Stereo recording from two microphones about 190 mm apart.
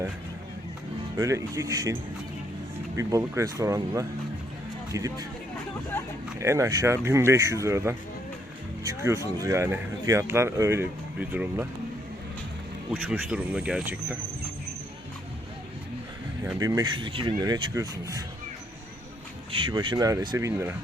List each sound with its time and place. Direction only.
1.1 s speech: 15° right (ahead or behind)
6.4 s speech: 15° right (ahead or behind)
12.9 s speech: 5° right (ahead or behind)
16.4 s speech: 15° right (ahead or behind)
19.5 s speech: 25° right (ahead or behind)